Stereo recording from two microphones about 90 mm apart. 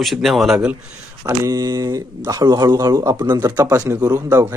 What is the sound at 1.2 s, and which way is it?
A man's voice, 40° right (ahead or behind).